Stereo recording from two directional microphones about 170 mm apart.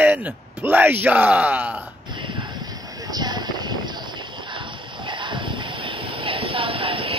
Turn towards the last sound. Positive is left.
turn(degrees=-30)  # may be behind; listen again after turning